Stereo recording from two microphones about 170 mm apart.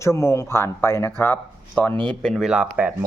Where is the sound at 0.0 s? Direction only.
15° left (ahead or behind).